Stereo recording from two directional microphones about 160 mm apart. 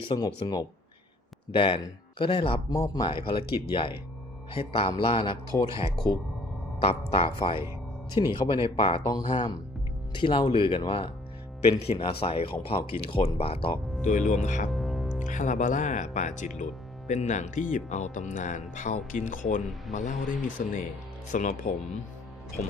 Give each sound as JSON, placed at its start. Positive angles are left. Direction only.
{"t": 0.0, "sound": "speech", "side_deg": 30}
{"t": 9.1, "sound": "speech", "side_deg": 20}
{"t": 10.2, "sound": "speech", "side_deg": 30}
{"t": 14.0, "sound": "speech", "side_deg": 50}
{"t": 14.7, "sound": "music", "side_deg": 0}
{"t": 15.2, "sound": "speech", "side_deg": 50}